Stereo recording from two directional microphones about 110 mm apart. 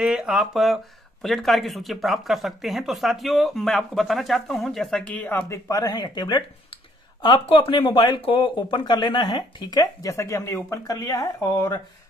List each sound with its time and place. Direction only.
0.0 s speech: 5° right (ahead or behind); by 5.6 s 15° left (ahead or behind)
5.7 s speech: 35° left (ahead or behind)